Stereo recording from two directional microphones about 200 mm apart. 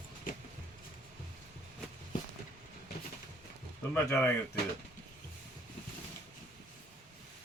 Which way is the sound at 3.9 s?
10° left (ahead or behind).